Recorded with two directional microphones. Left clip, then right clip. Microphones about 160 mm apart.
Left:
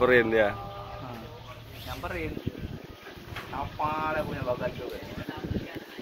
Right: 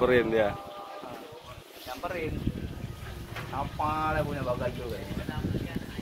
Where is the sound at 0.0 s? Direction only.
5° right (ahead or behind).